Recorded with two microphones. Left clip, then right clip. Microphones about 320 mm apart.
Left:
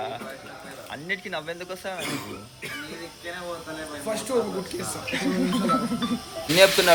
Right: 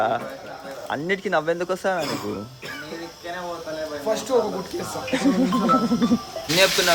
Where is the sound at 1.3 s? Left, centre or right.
Right.